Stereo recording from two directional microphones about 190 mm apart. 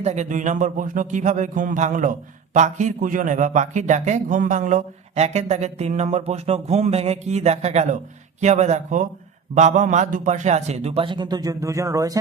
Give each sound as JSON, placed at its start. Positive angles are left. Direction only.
{"t": 0.0, "sound": "speech", "side_deg": -35}